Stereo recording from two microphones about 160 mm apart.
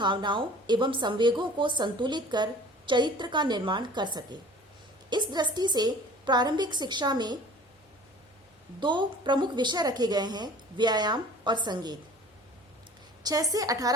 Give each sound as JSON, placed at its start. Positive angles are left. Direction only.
{"t": 0.0, "sound": "a woman's voice", "side_deg": -30}
{"t": 8.8, "sound": "a woman's voice", "side_deg": -30}
{"t": 13.2, "sound": "a woman's voice", "side_deg": -25}